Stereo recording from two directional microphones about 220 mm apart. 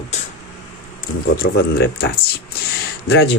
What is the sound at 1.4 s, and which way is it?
Speech, 45° left (ahead or behind).